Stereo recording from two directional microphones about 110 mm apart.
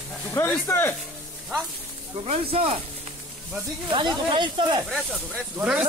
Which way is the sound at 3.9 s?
45° right (ahead or behind).